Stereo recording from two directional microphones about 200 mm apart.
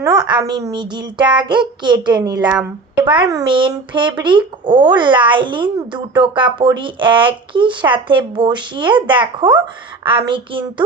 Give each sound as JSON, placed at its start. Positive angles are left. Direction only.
{"t": 0.0, "sound": "speech", "side_deg": -20}